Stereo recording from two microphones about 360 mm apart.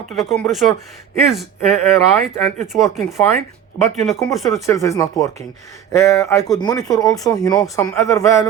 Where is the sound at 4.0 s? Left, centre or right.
Centre.